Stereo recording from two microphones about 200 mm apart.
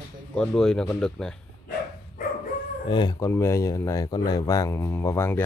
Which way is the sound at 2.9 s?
20° left (ahead or behind).